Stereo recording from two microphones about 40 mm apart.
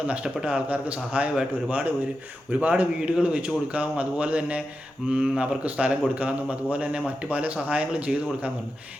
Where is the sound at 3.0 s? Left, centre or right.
Right.